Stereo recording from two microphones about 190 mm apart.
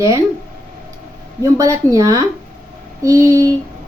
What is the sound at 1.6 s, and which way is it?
A woman's voice, 15° right (ahead or behind).